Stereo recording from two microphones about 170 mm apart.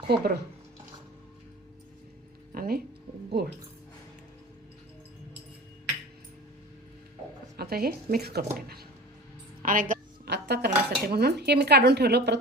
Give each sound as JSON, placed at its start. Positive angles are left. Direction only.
{"t": 0.1, "sound": "speech", "side_deg": -70}
{"t": 2.6, "sound": "speech", "side_deg": -60}
{"t": 7.5, "sound": "speech", "side_deg": -65}
{"t": 9.6, "sound": "a woman's voice", "side_deg": -50}
{"t": 10.2, "sound": "speech", "side_deg": -75}